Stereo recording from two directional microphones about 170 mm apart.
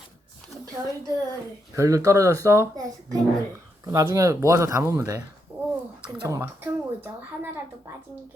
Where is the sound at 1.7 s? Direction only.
20° right (ahead or behind).